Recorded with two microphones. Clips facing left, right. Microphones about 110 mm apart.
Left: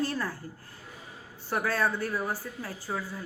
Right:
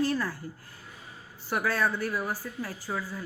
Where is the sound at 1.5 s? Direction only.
30° left (ahead or behind).